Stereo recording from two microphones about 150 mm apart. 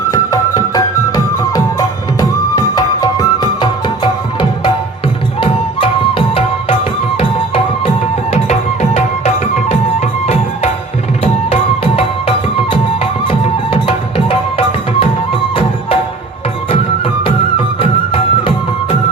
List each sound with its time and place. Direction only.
0.1 s music: 25° left (ahead or behind)
8.3 s music: 50° left (ahead or behind)
12.7 s music: 40° left (ahead or behind)
17.7 s music: 35° left (ahead or behind)